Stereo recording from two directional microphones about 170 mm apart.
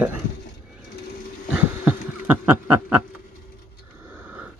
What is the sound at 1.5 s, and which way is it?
Bee, 10° right (ahead or behind).